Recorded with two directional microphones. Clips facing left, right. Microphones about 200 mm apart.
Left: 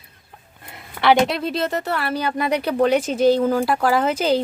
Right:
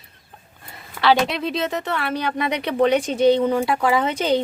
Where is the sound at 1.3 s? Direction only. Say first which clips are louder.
Left 1 dB; centre (ahead or behind).